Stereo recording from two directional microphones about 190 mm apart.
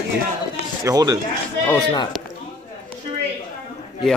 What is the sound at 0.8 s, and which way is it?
Speech, 20° right (ahead or behind).